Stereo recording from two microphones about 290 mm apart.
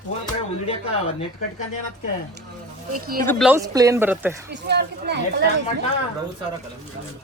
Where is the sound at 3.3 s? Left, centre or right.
Centre.